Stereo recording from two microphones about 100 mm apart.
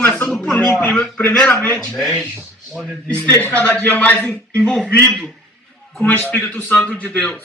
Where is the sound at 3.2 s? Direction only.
20° left (ahead or behind).